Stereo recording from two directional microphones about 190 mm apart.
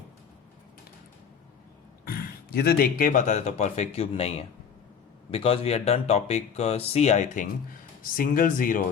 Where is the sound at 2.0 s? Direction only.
55° left (ahead or behind).